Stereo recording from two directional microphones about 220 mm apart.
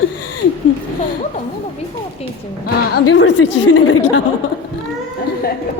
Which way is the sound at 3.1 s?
55° left (ahead or behind).